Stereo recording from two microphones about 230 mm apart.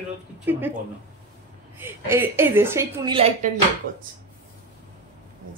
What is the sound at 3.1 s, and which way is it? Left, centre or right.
Speech, right.